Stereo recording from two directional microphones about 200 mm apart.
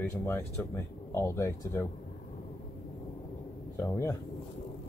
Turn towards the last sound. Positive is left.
turn(degrees=15)  # may be behind; listen again after turning